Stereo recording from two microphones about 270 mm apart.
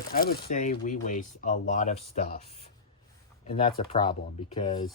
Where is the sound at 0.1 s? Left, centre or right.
Left; by 4.9 s centre.